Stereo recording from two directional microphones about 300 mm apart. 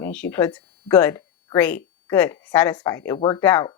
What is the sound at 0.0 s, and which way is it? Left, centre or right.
Speech, centre.